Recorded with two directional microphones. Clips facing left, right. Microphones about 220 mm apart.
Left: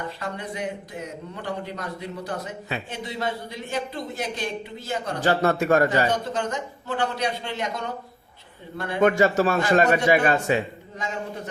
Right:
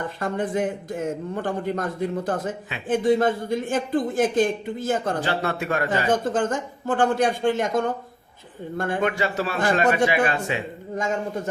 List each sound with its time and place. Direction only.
0.2 s a man's voice: 50° right (ahead or behind)
5.2 s speech: 45° left (ahead or behind)
6.1 s a man's voice: 50° right (ahead or behind)
9.0 s speech: 45° left (ahead or behind)
10.9 s a man's voice: 50° right (ahead or behind)